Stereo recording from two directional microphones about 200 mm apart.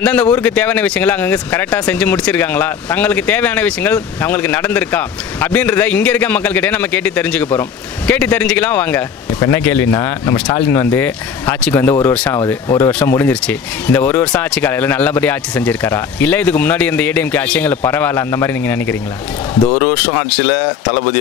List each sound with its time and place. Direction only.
0.0 s speech: 5° left (ahead or behind)